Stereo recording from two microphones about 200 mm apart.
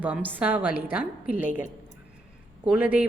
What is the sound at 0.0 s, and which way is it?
A woman's voice, 10° right (ahead or behind).